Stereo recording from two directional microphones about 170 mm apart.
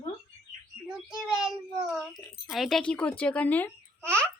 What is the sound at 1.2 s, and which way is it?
A child's voice, 5° right (ahead or behind).